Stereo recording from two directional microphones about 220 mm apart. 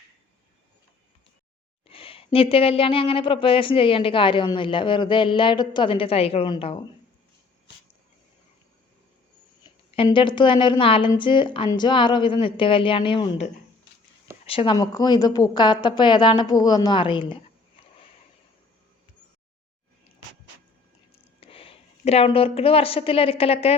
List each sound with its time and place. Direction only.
1.9 s speech: 25° left (ahead or behind)
9.9 s speech: 25° left (ahead or behind)
21.4 s a woman's voice: 25° left (ahead or behind)